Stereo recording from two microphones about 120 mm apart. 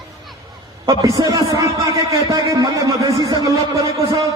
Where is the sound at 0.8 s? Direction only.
30° right (ahead or behind).